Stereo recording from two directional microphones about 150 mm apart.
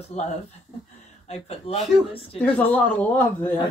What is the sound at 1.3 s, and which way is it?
Speech, 45° left (ahead or behind).